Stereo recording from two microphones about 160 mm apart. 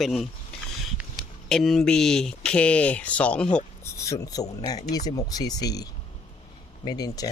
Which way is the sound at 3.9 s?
20° left (ahead or behind).